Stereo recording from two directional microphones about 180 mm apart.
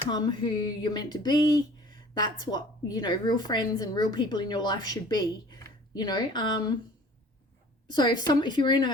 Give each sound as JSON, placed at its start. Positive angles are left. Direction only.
{"t": 0.1, "sound": "a woman's voice", "side_deg": 25}
{"t": 7.9, "sound": "a woman's voice", "side_deg": 25}